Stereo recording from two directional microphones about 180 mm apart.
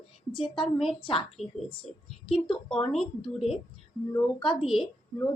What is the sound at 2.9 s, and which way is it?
Speech, centre (ahead or behind).